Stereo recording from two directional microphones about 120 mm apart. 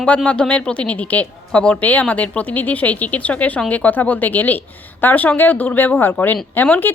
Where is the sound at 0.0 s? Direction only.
10° left (ahead or behind).